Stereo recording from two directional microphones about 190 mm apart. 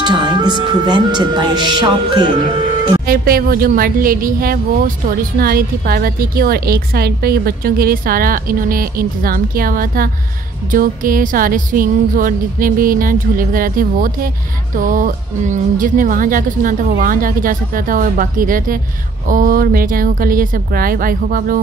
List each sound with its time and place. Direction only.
0.0 s speech: 25° right (ahead or behind)
3.1 s a woman's voice: 50° right (ahead or behind)